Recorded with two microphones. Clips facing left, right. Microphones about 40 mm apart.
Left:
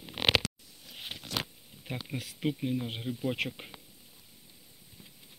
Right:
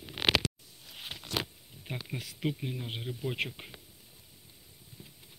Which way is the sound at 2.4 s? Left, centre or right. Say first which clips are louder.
Left 4 dB; centre.